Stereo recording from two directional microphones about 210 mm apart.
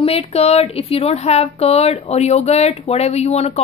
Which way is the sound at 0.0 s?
30° left (ahead or behind).